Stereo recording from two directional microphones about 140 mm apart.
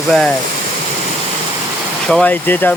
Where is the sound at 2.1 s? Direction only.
10° left (ahead or behind).